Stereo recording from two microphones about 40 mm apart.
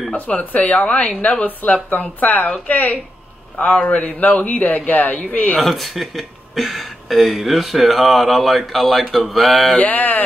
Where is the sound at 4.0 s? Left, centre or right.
Left.